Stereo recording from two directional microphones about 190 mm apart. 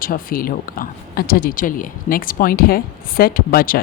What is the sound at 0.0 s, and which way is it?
Speech, 50° left (ahead or behind).